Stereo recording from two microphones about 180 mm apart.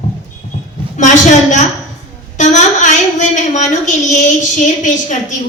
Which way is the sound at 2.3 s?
45° left (ahead or behind).